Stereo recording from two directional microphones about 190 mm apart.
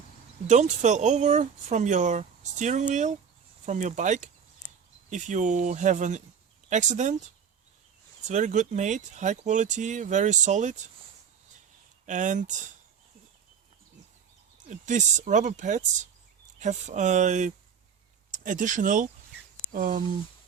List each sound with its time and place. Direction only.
0.4 s speech: 40° right (ahead or behind)
8.3 s speech: 40° right (ahead or behind)
12.0 s speech: 40° right (ahead or behind)
14.7 s speech: 40° right (ahead or behind)